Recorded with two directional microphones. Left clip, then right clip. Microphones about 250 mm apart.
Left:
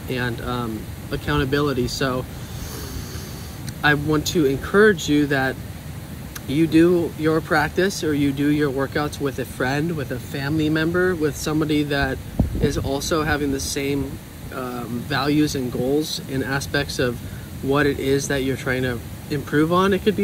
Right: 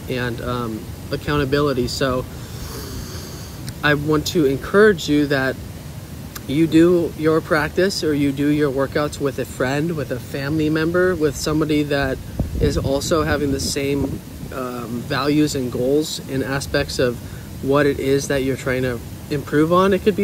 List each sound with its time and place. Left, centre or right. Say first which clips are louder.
0.1 s speech: right 2 dB; centre
3.8 s speech: right 1 dB; centre